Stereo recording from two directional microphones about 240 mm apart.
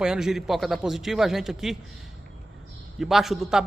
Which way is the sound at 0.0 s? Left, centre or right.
Centre.